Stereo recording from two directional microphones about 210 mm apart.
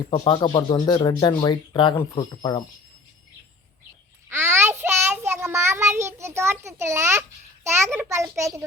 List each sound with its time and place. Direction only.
0.1 s speech: 20° left (ahead or behind)
4.3 s child singing: 10° right (ahead or behind)
7.9 s a child's voice: 15° right (ahead or behind)